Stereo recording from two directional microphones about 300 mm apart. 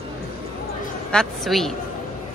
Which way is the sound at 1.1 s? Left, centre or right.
Centre.